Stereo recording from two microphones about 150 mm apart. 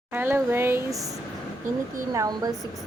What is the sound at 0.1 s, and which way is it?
Speech, 15° right (ahead or behind).